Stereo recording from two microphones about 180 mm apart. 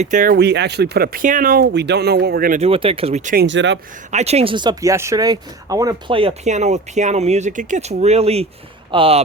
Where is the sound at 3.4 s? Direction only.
90° right.